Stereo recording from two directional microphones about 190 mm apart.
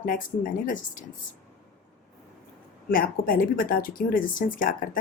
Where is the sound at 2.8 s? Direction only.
50° left (ahead or behind).